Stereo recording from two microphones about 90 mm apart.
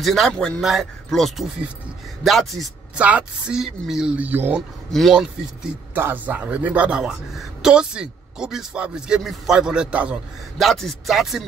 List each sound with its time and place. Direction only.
0.0 s speech: centre (ahead or behind)
3.0 s a woman's voice: 15° right (ahead or behind)
4.2 s speech: 20° right (ahead or behind)
5.1 s a woman's voice: 10° right (ahead or behind)
5.9 s a woman's voice: 20° right (ahead or behind)
10.6 s speech: centre (ahead or behind)